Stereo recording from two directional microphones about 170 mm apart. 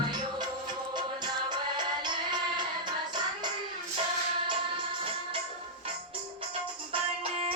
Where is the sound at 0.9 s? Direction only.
25° right (ahead or behind).